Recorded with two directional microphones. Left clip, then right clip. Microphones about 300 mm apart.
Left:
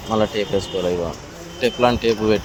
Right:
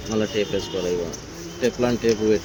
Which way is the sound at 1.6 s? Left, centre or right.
Centre.